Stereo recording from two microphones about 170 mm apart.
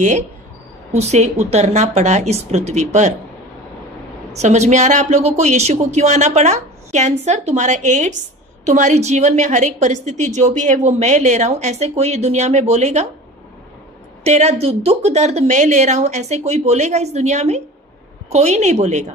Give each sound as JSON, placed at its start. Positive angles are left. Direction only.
{"t": 0.9, "sound": "a woman's voice", "side_deg": -40}
{"t": 4.3, "sound": "a woman's voice", "side_deg": -40}
{"t": 14.2, "sound": "a woman's voice", "side_deg": -40}